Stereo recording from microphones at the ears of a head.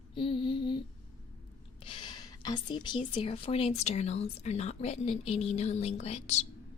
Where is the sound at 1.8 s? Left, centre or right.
Left.